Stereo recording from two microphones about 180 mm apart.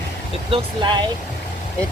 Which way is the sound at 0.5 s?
30° right (ahead or behind).